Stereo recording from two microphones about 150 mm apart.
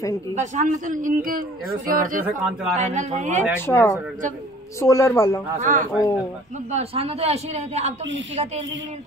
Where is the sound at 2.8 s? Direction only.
50° right (ahead or behind).